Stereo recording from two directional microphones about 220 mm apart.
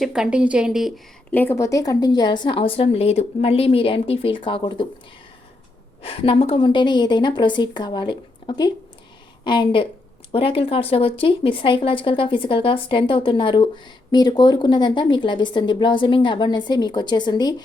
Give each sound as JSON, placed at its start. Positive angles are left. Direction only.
{"t": 0.0, "sound": "speech", "side_deg": -5}
{"t": 6.0, "sound": "a woman's voice", "side_deg": 25}